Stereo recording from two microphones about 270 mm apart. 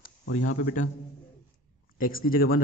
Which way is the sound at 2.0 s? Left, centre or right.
Left.